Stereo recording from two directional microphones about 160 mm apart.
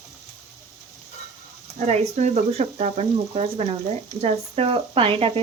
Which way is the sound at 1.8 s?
45° right (ahead or behind).